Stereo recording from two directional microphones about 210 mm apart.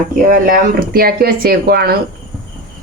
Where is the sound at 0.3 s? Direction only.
40° right (ahead or behind).